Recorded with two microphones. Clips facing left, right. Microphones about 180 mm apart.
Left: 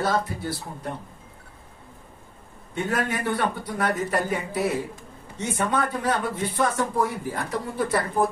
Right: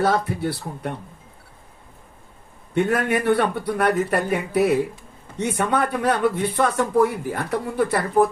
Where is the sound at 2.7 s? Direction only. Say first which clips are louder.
Right 6 dB; 65° right (ahead or behind).